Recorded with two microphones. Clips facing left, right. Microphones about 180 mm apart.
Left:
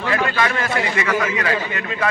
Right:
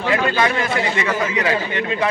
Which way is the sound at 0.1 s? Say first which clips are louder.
Right 2 dB; 20° right (ahead or behind).